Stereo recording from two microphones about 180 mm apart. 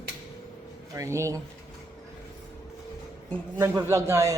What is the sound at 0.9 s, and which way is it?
Speech, 15° right (ahead or behind).